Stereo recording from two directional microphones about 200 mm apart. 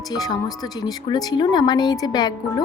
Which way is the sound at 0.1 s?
20° left (ahead or behind).